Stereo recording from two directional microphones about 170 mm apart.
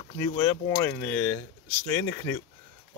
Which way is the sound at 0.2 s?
25° left (ahead or behind).